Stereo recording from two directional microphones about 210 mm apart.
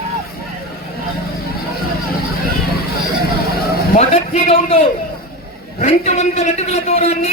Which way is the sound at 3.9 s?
30° left (ahead or behind).